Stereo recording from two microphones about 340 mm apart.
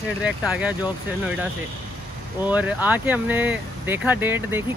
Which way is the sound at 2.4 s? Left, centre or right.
Centre.